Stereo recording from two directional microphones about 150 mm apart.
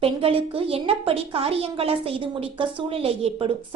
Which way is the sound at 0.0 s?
40° right (ahead or behind).